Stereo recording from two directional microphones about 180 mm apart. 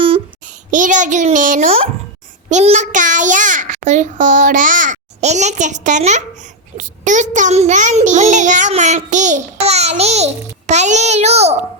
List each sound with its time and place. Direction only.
0.4 s a child's voice: 45° right (ahead or behind)